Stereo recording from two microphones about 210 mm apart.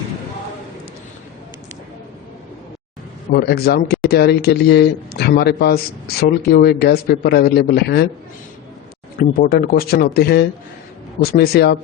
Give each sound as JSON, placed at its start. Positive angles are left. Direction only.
{"t": 3.3, "sound": "speech", "side_deg": 50}
{"t": 9.1, "sound": "speech", "side_deg": 45}